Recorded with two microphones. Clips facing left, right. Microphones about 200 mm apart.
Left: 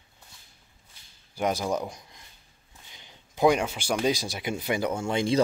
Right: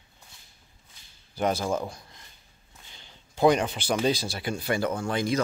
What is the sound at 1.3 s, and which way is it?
Speech, 10° left (ahead or behind).